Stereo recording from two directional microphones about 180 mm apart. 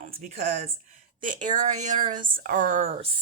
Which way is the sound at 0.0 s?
50° right (ahead or behind).